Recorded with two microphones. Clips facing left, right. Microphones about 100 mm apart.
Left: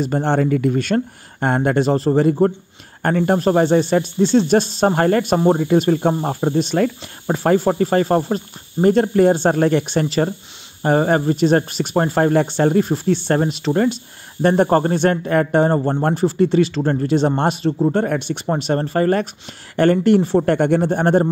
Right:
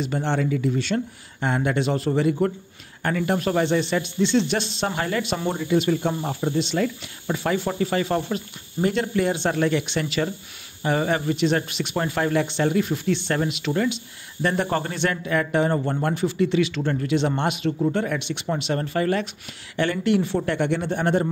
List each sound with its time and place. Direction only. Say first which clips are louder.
0.0 s speech: left 6 dB; 45° left (ahead or behind)
18.0 s speech: left 6 dB; 45° left (ahead or behind)